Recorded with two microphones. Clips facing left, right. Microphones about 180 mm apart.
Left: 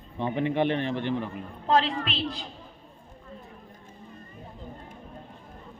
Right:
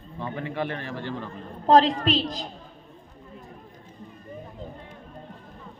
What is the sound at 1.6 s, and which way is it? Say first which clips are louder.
Speech: right 6 dB; 40° right (ahead or behind).